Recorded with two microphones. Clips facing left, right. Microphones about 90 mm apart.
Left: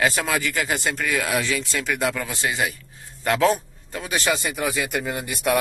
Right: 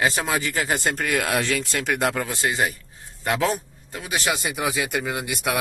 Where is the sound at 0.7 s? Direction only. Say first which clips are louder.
Right 3 dB; 50° right (ahead or behind).